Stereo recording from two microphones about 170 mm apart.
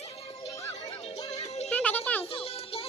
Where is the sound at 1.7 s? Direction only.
10° left (ahead or behind).